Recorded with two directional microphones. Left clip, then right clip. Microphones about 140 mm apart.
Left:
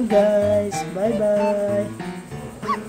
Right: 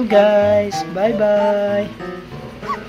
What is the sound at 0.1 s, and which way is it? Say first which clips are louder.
Speech: right 5 dB; 20° left (ahead or behind).